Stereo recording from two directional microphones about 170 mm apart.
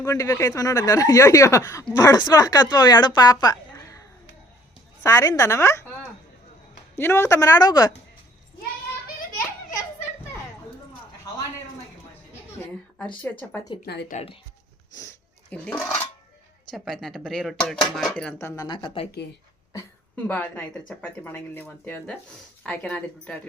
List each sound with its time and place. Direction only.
0.0 s speech: 15° left (ahead or behind)
5.0 s speech: 20° left (ahead or behind)
6.9 s speech: 15° left (ahead or behind)
13.8 s speech: 75° left (ahead or behind)
14.1 s speech: 40° left (ahead or behind)
15.4 s speech: 10° left (ahead or behind); by 19.0 s 30° left (ahead or behind)
20.1 s speech: 10° left (ahead or behind)